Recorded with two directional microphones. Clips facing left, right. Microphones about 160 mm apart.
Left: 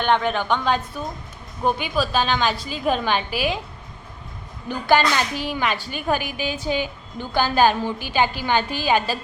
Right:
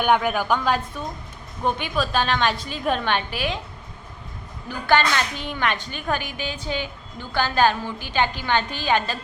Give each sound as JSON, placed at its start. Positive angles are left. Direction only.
{"t": 0.0, "sound": "a woman's voice", "side_deg": -10}
{"t": 4.9, "sound": "a woman's voice", "side_deg": 5}